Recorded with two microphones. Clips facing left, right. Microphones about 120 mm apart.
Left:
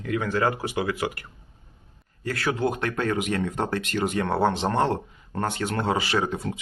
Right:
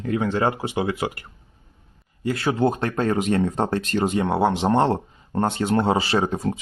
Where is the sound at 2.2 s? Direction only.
25° right (ahead or behind).